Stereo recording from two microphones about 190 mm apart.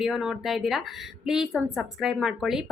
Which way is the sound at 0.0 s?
5° right (ahead or behind).